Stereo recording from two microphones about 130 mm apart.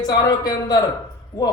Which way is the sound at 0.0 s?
30° left (ahead or behind).